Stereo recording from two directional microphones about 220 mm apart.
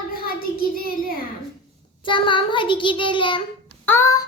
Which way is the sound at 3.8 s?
10° left (ahead or behind).